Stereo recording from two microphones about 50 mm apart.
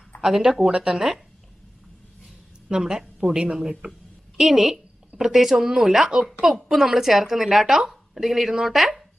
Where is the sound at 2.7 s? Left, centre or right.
Centre.